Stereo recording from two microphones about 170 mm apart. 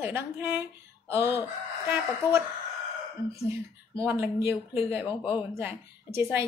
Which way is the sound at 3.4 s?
15° right (ahead or behind).